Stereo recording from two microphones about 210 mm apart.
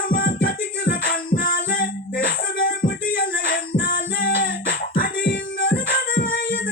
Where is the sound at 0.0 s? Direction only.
45° left (ahead or behind).